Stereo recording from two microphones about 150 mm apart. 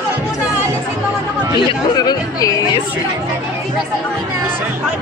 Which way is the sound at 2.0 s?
25° left (ahead or behind).